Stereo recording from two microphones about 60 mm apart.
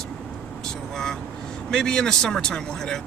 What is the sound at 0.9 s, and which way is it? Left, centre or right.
Speech, centre.